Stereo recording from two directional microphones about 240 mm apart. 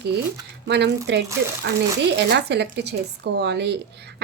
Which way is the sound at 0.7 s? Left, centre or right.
Right.